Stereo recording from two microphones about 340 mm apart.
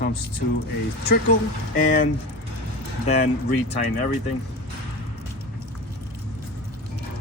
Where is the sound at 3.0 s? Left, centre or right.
Centre.